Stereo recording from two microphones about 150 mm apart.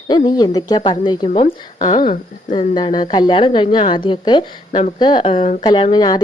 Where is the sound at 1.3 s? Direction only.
50° left (ahead or behind).